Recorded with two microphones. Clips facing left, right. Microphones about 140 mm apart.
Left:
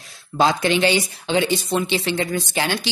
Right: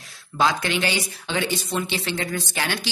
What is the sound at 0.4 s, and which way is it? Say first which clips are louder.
Speech: left 5 dB; 25° left (ahead or behind).